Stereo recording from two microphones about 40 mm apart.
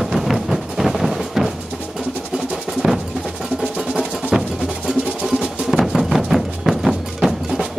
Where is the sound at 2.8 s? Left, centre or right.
Centre.